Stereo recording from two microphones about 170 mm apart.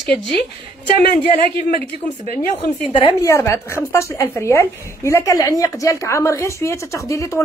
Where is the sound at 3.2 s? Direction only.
15° left (ahead or behind).